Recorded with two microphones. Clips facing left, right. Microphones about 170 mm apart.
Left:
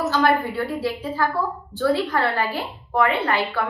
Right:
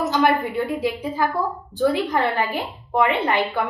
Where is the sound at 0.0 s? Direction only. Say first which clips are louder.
Right 1 dB; 20° right (ahead or behind).